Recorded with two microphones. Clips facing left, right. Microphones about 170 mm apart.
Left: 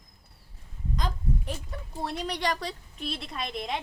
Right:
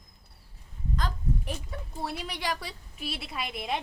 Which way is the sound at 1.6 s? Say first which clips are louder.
Left 1 dB; 5° right (ahead or behind).